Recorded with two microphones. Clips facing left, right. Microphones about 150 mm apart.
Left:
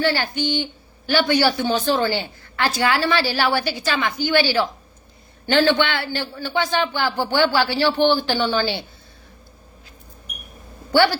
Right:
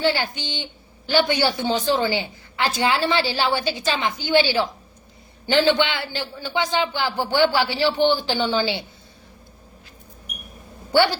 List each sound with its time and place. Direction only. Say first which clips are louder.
0.0 s a woman's voice: left 1 dB; 20° right (ahead or behind)
10.9 s a woman's voice: left 1 dB; 20° right (ahead or behind)